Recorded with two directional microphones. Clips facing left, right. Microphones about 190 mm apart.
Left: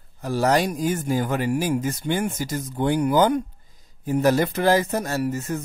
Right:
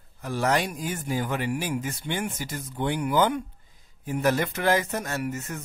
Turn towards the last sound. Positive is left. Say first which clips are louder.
# left 6 dB
turn(degrees=35)  # may be behind; listen again after turning